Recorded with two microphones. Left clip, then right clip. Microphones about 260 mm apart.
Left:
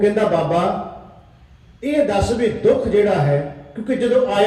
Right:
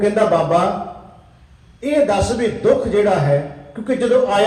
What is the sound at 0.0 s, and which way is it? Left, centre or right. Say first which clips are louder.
Speech: right 1 dB; right.